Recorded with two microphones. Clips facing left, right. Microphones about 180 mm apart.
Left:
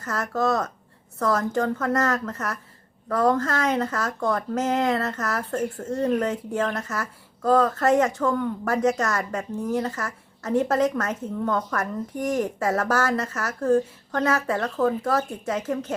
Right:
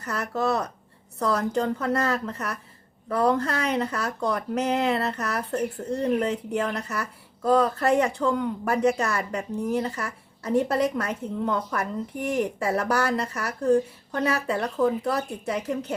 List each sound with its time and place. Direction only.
0.0 s speech: 15° right (ahead or behind)